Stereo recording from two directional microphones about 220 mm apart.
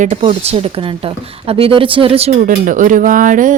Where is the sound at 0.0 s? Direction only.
30° right (ahead or behind).